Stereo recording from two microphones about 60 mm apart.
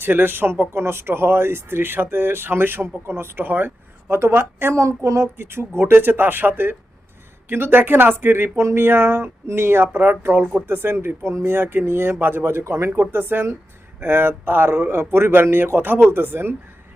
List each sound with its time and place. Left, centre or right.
0.0 s speech: right
4.1 s speech: right
4.7 s speech: right
5.4 s speech: right